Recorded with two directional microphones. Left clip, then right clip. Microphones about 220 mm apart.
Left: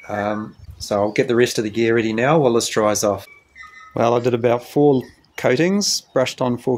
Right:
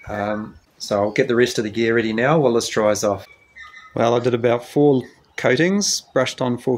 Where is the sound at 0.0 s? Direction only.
25° left (ahead or behind).